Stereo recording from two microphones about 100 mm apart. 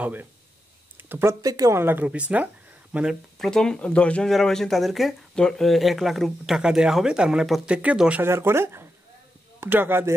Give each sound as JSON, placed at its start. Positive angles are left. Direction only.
{"t": 0.0, "sound": "speech", "side_deg": -20}
{"t": 1.0, "sound": "a sound", "side_deg": -20}
{"t": 1.4, "sound": "speech", "side_deg": -35}
{"t": 1.8, "sound": "speech", "side_deg": -25}
{"t": 3.3, "sound": "speech", "side_deg": 5}
{"t": 8.2, "sound": "speech", "side_deg": -25}